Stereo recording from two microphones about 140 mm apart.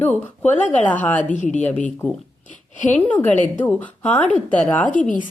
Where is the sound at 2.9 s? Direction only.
10° left (ahead or behind).